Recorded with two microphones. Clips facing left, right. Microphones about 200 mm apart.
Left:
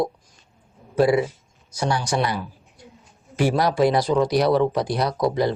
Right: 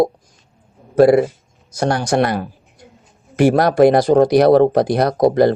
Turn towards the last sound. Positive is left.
turn(degrees=-50)  # may be behind; listen again after turning